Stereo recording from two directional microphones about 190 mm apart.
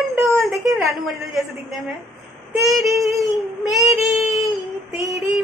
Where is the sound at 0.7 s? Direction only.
Centre (ahead or behind).